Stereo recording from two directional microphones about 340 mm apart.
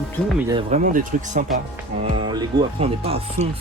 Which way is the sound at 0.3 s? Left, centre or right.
Centre.